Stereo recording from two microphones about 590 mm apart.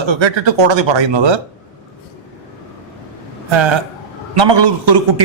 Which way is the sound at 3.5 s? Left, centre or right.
Right.